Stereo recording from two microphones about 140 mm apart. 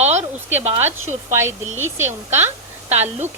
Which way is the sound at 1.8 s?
15° right (ahead or behind).